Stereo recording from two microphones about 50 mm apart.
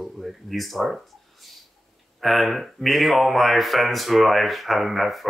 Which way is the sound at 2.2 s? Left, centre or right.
Centre.